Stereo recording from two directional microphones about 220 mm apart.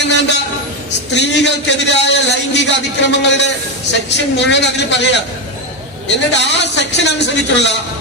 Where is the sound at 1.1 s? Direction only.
50° left (ahead or behind).